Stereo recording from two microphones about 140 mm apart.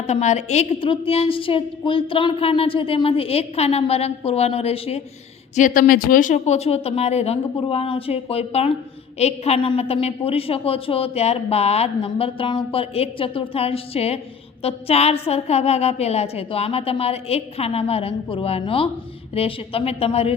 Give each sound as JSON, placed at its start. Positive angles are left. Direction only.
{"t": 0.1, "sound": "a woman's voice", "side_deg": 55}
{"t": 5.5, "sound": "a woman's voice", "side_deg": 75}